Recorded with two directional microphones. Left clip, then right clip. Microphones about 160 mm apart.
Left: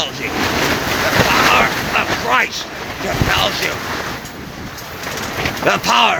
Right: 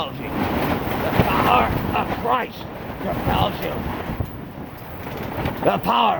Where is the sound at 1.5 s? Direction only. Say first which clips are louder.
Left 5 dB; 20° right (ahead or behind).